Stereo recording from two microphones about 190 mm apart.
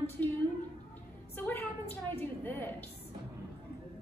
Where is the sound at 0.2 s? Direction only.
10° left (ahead or behind).